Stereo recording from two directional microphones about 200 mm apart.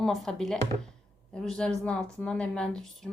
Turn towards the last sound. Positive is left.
turn(degrees=0)  # may be behind; listen again after turning